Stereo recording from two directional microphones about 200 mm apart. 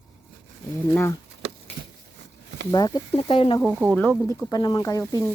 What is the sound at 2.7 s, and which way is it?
Speech, 20° left (ahead or behind).